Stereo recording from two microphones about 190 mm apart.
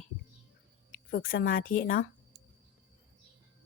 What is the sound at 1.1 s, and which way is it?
Speech, 50° left (ahead or behind).